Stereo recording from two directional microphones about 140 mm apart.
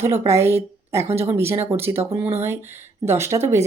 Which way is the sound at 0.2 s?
20° right (ahead or behind).